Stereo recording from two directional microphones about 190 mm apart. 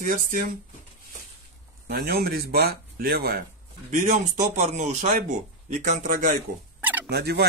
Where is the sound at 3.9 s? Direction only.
40° right (ahead or behind).